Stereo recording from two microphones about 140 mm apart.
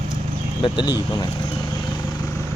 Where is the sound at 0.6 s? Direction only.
35° left (ahead or behind).